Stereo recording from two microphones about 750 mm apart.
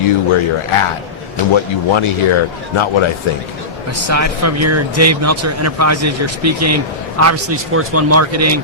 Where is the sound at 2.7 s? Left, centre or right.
Left.